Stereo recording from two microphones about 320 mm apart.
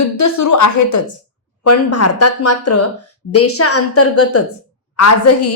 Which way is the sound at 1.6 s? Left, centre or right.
Left.